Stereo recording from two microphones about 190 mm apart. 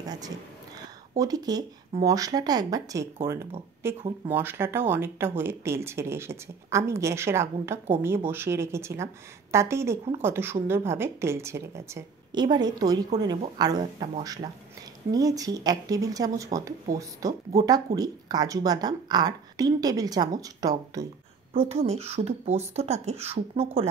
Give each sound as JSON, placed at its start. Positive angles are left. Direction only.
{"t": 1.1, "sound": "speech", "side_deg": -20}
{"t": 21.5, "sound": "speech", "side_deg": -35}